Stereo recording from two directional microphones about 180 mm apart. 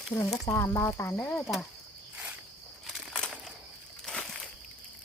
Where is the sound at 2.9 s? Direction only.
Centre (ahead or behind).